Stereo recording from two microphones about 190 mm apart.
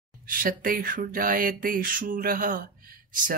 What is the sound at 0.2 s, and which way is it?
Speech, 45° right (ahead or behind).